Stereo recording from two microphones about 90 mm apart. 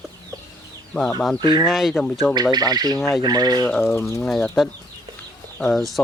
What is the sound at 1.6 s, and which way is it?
Speech, 5° right (ahead or behind).